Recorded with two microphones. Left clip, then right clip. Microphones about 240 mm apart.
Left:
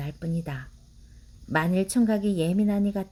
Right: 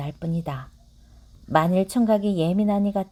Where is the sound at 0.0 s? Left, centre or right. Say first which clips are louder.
Right 4 dB; centre.